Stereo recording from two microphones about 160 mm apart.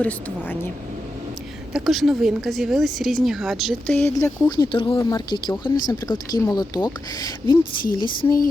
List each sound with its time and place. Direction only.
0.0 s speech: 10° left (ahead or behind)
1.7 s a woman's voice: centre (ahead or behind)
3.9 s speech: 15° left (ahead or behind)
4.4 s speech: 25° left (ahead or behind)